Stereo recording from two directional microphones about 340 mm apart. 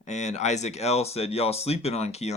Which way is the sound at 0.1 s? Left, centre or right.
Centre.